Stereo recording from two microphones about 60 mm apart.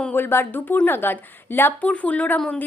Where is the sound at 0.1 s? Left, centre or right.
Left.